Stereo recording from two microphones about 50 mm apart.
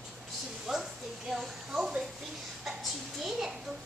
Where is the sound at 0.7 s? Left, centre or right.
Centre.